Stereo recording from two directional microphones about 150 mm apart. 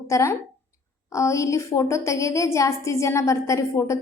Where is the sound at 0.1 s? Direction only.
20° left (ahead or behind).